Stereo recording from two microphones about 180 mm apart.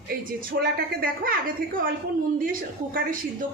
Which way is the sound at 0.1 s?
60° right (ahead or behind).